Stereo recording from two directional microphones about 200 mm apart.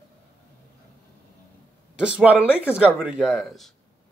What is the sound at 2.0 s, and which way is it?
Speech, 5° right (ahead or behind).